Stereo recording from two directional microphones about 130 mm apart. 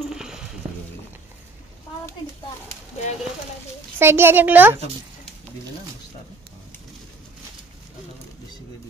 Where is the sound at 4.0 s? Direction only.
20° right (ahead or behind).